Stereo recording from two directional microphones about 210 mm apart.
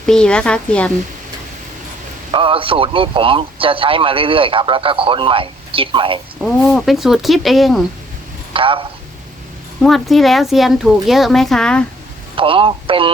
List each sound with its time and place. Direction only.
0.0 s speech: 5° left (ahead or behind)
2.3 s speech: 25° right (ahead or behind)
6.7 s speech: centre (ahead or behind)
8.5 s speech: 25° right (ahead or behind)
9.8 s speech: centre (ahead or behind)
12.4 s speech: 25° right (ahead or behind)